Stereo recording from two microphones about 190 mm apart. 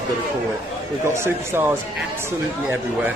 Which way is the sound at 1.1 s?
15° right (ahead or behind).